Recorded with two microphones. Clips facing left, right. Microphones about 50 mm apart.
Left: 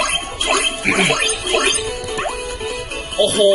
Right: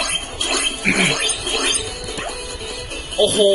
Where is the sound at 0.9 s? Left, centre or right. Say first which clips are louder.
Left 3 dB; left.